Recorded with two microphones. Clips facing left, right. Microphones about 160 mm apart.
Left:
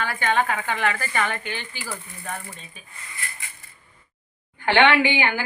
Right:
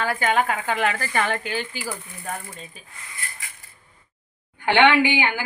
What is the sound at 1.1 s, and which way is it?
Speech, 40° right (ahead or behind).